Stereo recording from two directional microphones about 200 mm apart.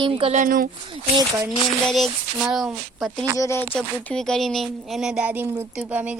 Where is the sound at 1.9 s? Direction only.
Centre (ahead or behind).